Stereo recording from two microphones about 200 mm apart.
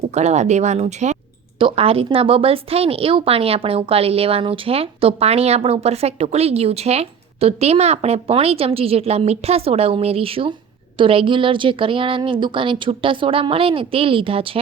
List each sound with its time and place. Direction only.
0.1 s a woman's voice: 35° right (ahead or behind)